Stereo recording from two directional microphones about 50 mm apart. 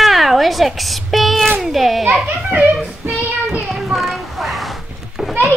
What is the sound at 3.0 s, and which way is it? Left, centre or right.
Child singing, right.